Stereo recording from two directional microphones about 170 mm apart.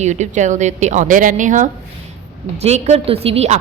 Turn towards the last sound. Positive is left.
turn(degrees=-40)  # may be behind; listen again after turning